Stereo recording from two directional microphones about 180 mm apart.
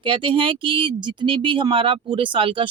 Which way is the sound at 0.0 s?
30° right (ahead or behind).